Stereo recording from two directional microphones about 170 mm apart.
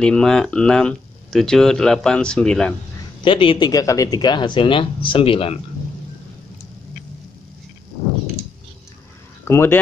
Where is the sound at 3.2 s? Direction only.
30° left (ahead or behind).